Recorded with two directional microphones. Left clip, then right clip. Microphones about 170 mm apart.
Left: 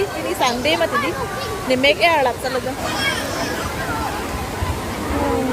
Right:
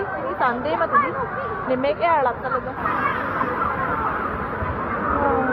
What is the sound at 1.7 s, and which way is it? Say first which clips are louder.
Speech: left 5 dB; 20° left (ahead or behind).